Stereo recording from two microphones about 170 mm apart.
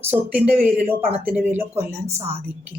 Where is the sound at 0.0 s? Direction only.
10° right (ahead or behind).